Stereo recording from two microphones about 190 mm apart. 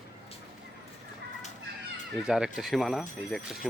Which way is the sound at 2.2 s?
5° right (ahead or behind).